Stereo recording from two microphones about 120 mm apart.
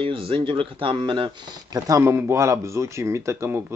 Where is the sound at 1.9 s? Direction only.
20° right (ahead or behind).